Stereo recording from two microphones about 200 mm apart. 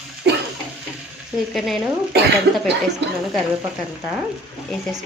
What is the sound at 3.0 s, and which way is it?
Speech, 60° right (ahead or behind).